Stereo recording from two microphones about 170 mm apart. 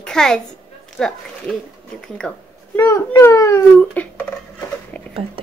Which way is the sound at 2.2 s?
5° left (ahead or behind).